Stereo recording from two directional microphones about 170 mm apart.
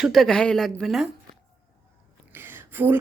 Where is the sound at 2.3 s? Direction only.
15° right (ahead or behind).